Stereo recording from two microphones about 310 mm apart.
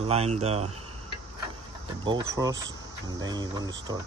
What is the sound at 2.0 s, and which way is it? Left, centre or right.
Speech, centre.